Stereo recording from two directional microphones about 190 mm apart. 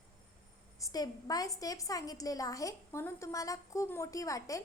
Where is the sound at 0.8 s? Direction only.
20° left (ahead or behind).